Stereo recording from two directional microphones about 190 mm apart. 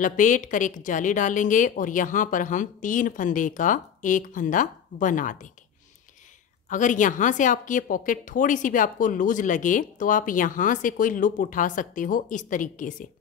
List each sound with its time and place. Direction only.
0.0 s a woman's voice: 45° left (ahead or behind)
6.7 s a woman's voice: 40° left (ahead or behind)